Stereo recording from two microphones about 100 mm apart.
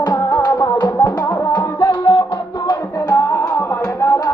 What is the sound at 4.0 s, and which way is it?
Music, 30° left (ahead or behind).